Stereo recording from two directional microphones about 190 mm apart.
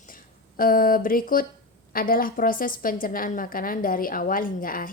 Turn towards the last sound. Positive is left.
turn(degrees=45)  # may be behind; listen again after turning